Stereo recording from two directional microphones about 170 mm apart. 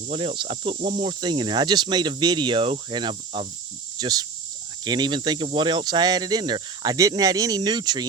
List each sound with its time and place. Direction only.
0.1 s cricket: 35° right (ahead or behind)
1.0 s speech: 25° right (ahead or behind)